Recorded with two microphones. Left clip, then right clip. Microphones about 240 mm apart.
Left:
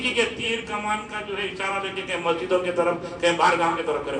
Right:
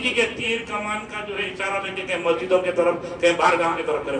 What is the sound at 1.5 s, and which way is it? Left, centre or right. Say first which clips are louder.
A man's voice: right 1 dB; left.